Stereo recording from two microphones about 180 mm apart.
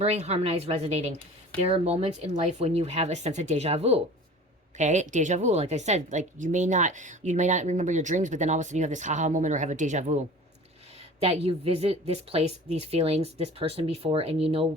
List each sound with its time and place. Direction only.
0.0 s a woman's voice: 35° right (ahead or behind)